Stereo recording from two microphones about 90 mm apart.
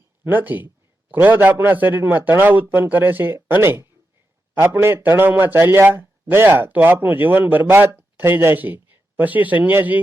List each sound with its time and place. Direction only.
0.3 s a man's voice: 20° right (ahead or behind)